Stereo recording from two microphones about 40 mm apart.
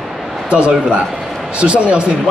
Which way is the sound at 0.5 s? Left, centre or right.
Right.